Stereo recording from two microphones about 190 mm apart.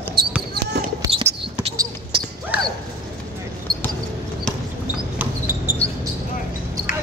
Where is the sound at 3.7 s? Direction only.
20° right (ahead or behind).